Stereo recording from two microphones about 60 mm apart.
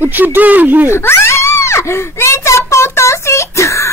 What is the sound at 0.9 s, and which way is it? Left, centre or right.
Screaming, left.